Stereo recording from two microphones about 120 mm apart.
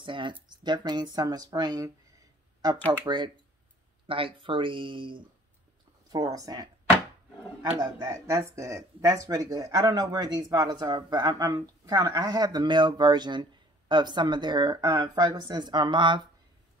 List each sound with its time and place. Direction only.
0.0 s speech: 40° right (ahead or behind)
4.1 s speech: 45° right (ahead or behind)
6.1 s speech: 30° right (ahead or behind)
7.8 s speech: 25° right (ahead or behind); by 16.2 s 40° right (ahead or behind)